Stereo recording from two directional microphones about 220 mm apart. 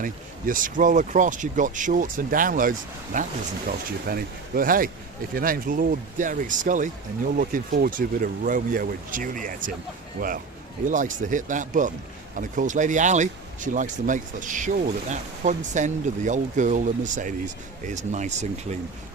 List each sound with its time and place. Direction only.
0.0 s speech: 40° right (ahead or behind)